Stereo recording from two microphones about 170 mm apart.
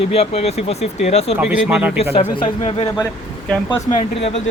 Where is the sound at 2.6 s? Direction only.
35° left (ahead or behind).